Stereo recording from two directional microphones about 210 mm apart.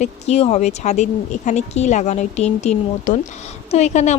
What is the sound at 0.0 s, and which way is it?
Speech, 30° left (ahead or behind).